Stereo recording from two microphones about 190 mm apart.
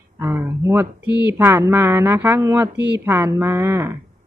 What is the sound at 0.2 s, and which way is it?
A woman's voice, 15° right (ahead or behind).